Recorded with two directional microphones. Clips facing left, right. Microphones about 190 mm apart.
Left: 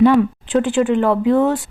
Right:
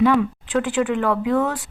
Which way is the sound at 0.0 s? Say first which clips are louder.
Left 5 dB; 30° left (ahead or behind).